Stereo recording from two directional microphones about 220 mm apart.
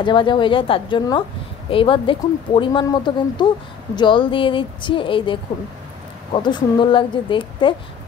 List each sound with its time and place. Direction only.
0.0 s speech: 20° left (ahead or behind)